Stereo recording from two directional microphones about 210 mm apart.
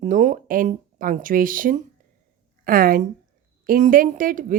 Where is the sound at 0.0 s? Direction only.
35° right (ahead or behind).